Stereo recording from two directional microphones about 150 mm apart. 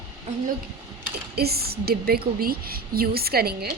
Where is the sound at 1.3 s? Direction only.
90° right.